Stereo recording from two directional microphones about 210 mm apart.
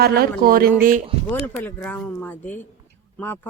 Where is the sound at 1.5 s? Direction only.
10° left (ahead or behind).